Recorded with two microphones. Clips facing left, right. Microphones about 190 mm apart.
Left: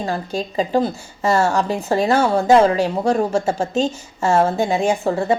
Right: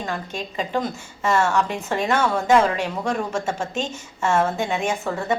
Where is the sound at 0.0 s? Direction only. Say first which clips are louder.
Left 6 dB; 35° left (ahead or behind).